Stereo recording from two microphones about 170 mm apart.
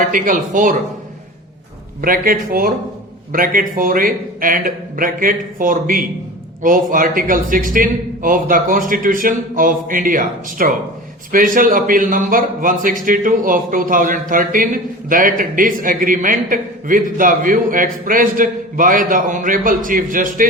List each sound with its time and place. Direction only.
0.1 s a man's voice: 50° right (ahead or behind)
2.0 s a man's voice: 55° right (ahead or behind)